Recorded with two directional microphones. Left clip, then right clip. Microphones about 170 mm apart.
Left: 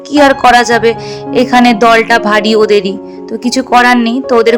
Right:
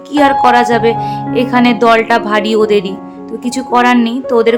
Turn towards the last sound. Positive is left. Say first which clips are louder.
# left 3 dB
turn(degrees=30)  # may be behind; listen again after turning